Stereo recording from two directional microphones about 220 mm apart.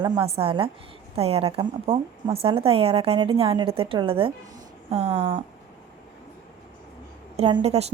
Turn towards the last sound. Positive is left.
turn(degrees=-30)  # may be behind; listen again after turning